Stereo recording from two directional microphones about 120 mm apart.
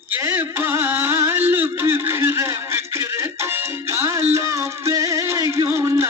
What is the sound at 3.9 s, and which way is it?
Music, 20° right (ahead or behind).